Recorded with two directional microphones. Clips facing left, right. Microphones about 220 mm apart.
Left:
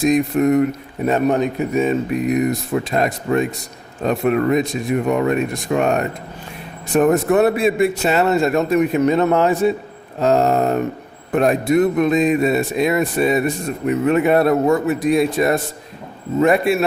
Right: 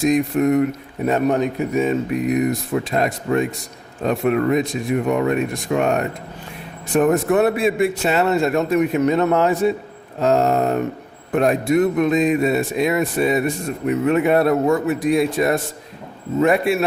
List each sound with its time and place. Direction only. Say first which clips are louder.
0.0 s a man's voice: left 1 dB; 40° left (ahead or behind)
1.0 s a man's voice: left 1 dB; 25° left (ahead or behind)
2.5 s a man's voice: left 1 dB; 40° left (ahead or behind)